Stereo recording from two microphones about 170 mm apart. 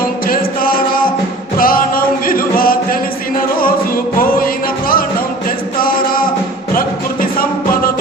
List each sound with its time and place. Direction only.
0.3 s music: 55° left (ahead or behind)
6.7 s music: 55° left (ahead or behind)